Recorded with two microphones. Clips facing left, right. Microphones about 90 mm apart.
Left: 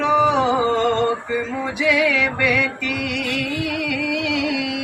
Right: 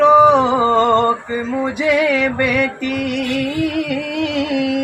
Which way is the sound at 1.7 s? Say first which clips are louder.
Right 2 dB; 45° right (ahead or behind).